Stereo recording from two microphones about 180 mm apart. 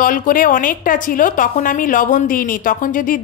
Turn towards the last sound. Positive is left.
turn(degrees=50)  # may be behind; listen again after turning